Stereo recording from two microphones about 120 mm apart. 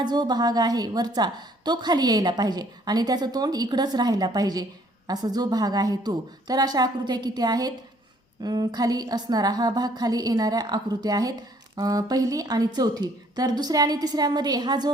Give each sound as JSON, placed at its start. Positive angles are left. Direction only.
{"t": 0.0, "sound": "a woman's voice", "side_deg": -35}